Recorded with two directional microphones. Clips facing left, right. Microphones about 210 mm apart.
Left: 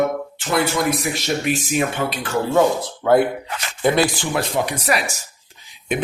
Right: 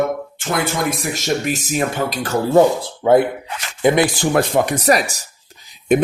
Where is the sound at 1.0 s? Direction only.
40° right (ahead or behind).